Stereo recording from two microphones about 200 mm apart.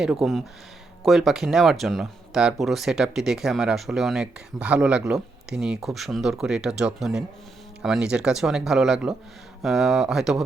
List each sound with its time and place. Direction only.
0.0 s speech: centre (ahead or behind)